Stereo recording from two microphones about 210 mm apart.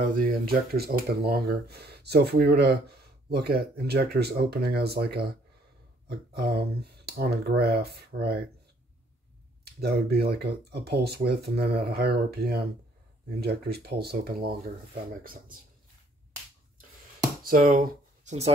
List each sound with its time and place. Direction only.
0.0 s speech: 45° right (ahead or behind)
9.8 s speech: 50° right (ahead or behind)
17.4 s speech: 40° right (ahead or behind)